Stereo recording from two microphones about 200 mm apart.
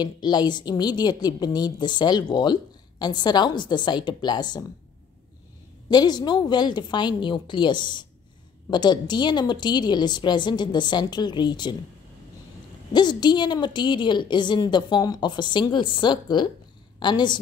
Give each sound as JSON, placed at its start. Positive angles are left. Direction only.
{"t": 0.0, "sound": "a woman's voice", "side_deg": 20}
{"t": 5.9, "sound": "a woman's voice", "side_deg": 20}
{"t": 12.9, "sound": "a woman's voice", "side_deg": 20}